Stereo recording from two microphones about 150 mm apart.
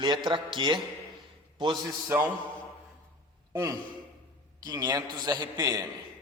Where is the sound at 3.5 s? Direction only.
25° right (ahead or behind).